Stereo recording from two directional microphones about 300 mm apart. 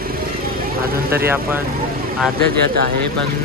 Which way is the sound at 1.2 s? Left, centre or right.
Centre.